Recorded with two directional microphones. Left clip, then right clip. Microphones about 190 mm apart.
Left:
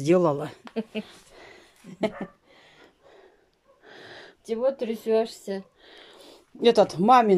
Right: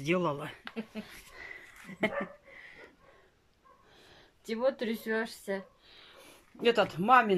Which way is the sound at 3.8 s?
45° left (ahead or behind).